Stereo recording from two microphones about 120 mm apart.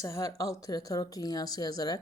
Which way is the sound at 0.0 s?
25° left (ahead or behind).